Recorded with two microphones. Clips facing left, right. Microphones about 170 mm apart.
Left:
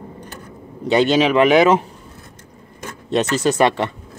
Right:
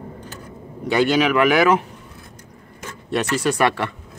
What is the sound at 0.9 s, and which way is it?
Speech, 20° left (ahead or behind).